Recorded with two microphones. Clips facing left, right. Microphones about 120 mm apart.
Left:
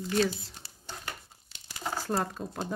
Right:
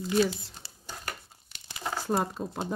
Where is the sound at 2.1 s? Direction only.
15° right (ahead or behind).